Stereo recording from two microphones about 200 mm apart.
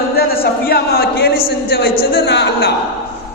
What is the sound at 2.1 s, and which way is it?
Speech, 60° left (ahead or behind).